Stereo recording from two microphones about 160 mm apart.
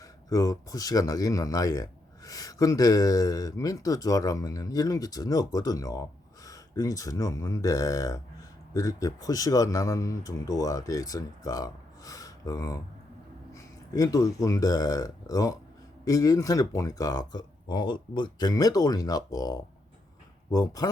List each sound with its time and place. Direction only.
0.0 s speech: 20° left (ahead or behind)